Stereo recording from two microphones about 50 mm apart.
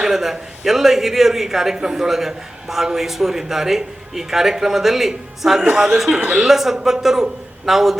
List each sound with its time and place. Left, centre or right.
0.0 s a man's voice: centre
6.1 s speech: right
6.4 s a man's voice: centre